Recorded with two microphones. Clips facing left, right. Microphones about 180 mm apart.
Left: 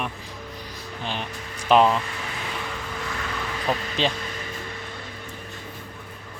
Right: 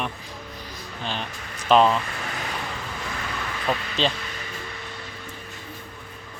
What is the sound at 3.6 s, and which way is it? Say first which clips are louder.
Speech: even; 15° left (ahead or behind).